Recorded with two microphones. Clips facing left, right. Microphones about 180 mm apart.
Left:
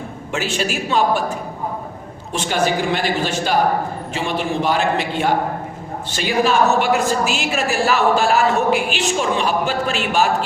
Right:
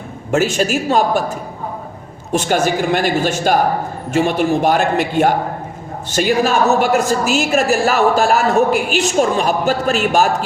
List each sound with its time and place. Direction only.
0.3 s a woman's voice: 45° right (ahead or behind)
2.3 s a woman's voice: 45° right (ahead or behind)